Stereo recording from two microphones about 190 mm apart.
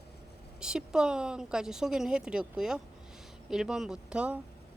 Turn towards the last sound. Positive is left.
turn(degrees=-5)  # may be behind; listen again after turning